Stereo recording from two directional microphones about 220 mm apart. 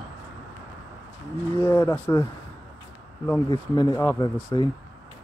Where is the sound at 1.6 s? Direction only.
15° left (ahead or behind).